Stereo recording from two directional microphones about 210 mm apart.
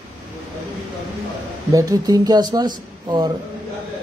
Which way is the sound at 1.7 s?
20° right (ahead or behind).